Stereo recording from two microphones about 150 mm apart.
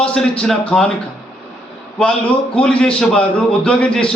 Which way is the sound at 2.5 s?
5° left (ahead or behind).